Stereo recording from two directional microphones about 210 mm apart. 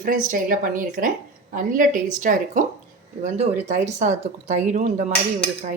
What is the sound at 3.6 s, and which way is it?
A woman's voice, 35° right (ahead or behind).